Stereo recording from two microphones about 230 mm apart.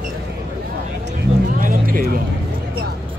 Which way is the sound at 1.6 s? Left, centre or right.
Right.